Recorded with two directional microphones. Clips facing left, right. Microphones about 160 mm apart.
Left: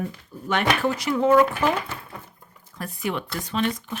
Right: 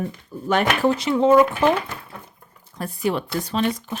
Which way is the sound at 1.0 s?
25° right (ahead or behind).